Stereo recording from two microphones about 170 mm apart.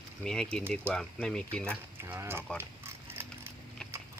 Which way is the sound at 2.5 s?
15° right (ahead or behind).